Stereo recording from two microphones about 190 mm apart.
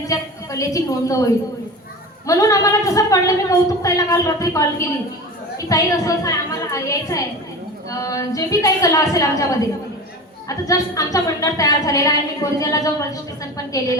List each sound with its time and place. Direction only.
0.1 s a woman's voice: 15° left (ahead or behind)